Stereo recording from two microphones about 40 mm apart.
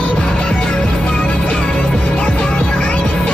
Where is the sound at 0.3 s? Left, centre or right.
Centre.